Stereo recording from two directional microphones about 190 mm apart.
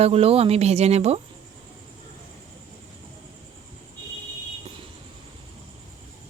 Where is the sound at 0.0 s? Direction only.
30° right (ahead or behind).